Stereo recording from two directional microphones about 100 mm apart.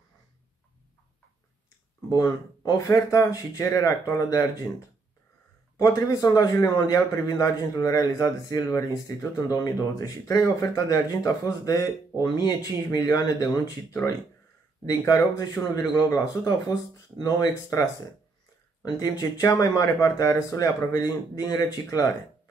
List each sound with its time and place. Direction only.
2.0 s a man's voice: 40° left (ahead or behind)
14.9 s a man's voice: 40° left (ahead or behind)
18.8 s a man's voice: 40° left (ahead or behind)